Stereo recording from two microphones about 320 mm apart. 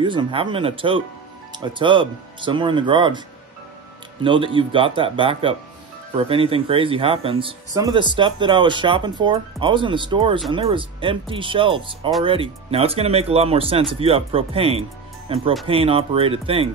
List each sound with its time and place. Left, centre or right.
0.0 s speech: centre
4.2 s speech: centre